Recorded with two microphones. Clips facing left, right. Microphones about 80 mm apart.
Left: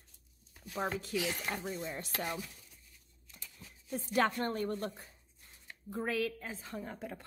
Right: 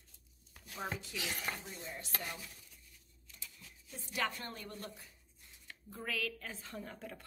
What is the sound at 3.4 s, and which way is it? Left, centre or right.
Speech, left.